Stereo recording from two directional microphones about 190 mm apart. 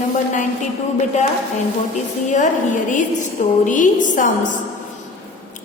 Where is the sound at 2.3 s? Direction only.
40° left (ahead or behind).